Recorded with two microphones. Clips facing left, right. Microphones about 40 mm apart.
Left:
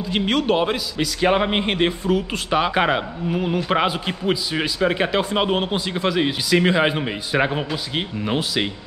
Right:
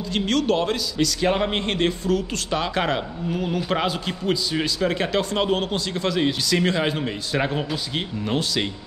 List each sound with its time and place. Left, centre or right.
0.1 s a man's voice: centre